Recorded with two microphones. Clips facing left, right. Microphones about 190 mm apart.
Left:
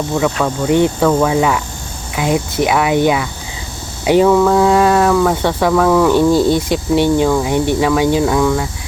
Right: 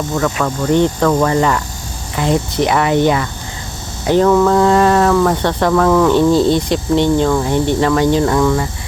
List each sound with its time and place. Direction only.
0.3 s speech: 5° left (ahead or behind)